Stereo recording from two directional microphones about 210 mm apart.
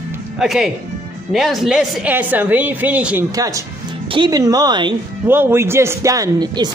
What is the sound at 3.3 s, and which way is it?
A man's voice, 15° right (ahead or behind).